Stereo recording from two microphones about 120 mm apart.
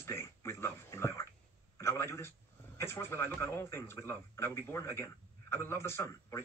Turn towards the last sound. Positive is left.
turn(degrees=25)  # may be behind; listen again after turning